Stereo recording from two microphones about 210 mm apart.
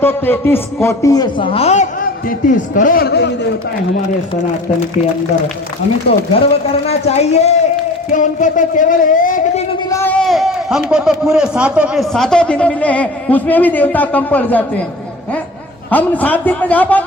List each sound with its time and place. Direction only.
0.0 s a man's voice: 10° left (ahead or behind); by 3.3 s 55° left (ahead or behind)
6.1 s speech: 30° left (ahead or behind)
9.9 s a man's voice: 10° left (ahead or behind)
15.9 s a man's voice: 5° left (ahead or behind)